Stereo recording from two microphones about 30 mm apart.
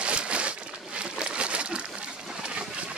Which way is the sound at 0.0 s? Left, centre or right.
Right.